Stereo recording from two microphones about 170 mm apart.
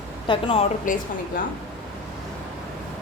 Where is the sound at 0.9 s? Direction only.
50° left (ahead or behind).